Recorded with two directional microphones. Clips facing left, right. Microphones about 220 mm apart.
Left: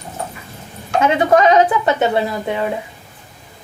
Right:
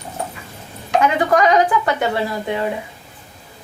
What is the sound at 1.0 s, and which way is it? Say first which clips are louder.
Speech: left 3 dB; 25° left (ahead or behind).